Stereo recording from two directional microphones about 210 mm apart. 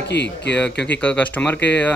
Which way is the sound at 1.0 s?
5° left (ahead or behind).